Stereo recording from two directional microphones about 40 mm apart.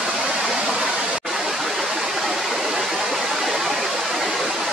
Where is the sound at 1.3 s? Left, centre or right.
Centre.